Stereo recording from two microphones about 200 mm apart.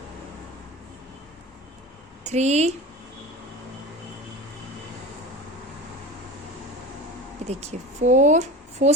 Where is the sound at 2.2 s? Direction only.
35° right (ahead or behind).